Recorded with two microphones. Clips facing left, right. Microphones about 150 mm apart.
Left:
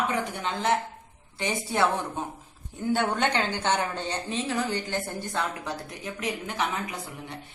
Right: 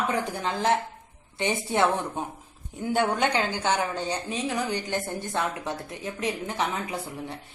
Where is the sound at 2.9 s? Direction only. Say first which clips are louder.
Right 1 dB; 10° right (ahead or behind).